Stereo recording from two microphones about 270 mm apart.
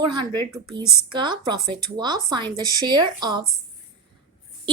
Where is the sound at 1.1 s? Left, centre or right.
Centre.